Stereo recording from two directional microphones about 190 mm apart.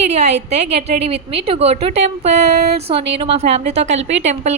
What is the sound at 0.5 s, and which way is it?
A woman's voice, 35° right (ahead or behind).